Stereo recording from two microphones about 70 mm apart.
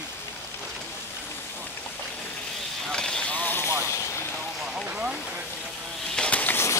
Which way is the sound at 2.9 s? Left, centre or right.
Centre.